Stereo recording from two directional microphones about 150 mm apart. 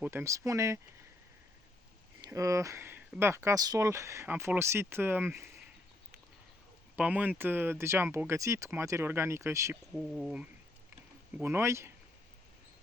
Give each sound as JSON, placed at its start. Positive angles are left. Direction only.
{"t": 0.0, "sound": "speech", "side_deg": -15}
{"t": 2.2, "sound": "speech", "side_deg": -20}
{"t": 6.9, "sound": "speech", "side_deg": -10}
{"t": 9.9, "sound": "speech", "side_deg": 0}
{"t": 11.4, "sound": "speech", "side_deg": -15}